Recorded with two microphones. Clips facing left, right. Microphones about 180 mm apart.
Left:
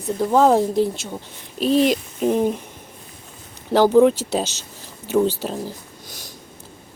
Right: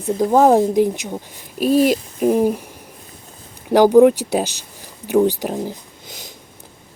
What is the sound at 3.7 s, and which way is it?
Speech, 15° right (ahead or behind).